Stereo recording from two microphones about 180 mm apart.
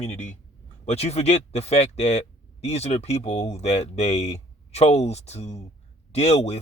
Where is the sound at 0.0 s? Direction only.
35° left (ahead or behind).